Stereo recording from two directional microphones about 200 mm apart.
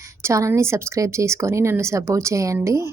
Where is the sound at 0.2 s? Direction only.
15° right (ahead or behind).